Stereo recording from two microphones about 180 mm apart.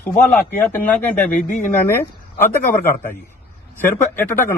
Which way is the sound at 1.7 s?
10° left (ahead or behind).